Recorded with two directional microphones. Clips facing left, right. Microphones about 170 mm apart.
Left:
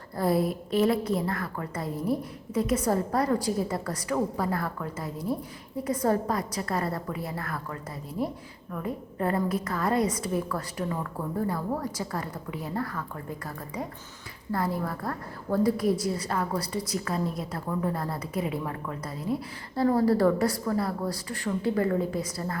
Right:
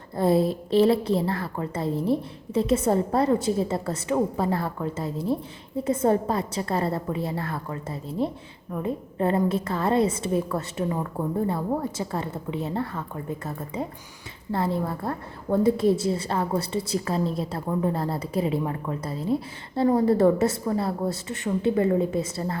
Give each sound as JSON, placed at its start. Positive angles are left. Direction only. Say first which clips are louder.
{"t": 0.2, "sound": "a woman's voice", "louder": "right 4 dB", "side_deg": -25}